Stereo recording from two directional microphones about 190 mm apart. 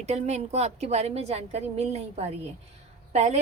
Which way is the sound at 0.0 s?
35° right (ahead or behind).